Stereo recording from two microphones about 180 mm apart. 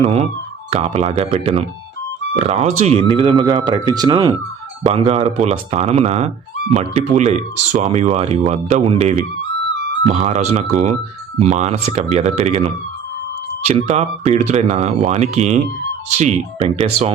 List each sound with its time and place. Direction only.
0.0 s speech: 35° right (ahead or behind)